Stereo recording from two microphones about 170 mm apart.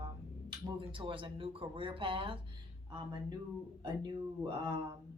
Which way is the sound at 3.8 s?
25° right (ahead or behind).